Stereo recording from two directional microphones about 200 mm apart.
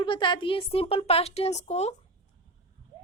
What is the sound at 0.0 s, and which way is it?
A woman's voice, 25° left (ahead or behind).